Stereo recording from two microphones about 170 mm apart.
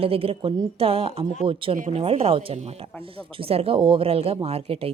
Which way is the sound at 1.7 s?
50° right (ahead or behind).